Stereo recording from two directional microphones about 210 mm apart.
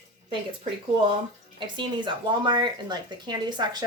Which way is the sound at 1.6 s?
20° right (ahead or behind).